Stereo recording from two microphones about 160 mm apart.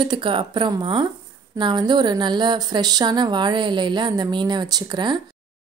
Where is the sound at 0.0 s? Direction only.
30° right (ahead or behind).